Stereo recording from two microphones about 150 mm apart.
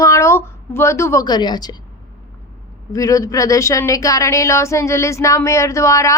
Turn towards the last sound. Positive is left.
turn(degrees=20)  # may be behind; listen again after turning